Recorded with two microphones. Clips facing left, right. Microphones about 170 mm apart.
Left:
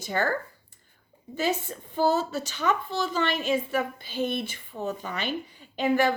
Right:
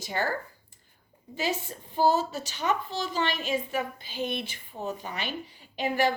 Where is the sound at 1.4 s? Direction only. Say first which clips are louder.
Left 3 dB; 55° left (ahead or behind).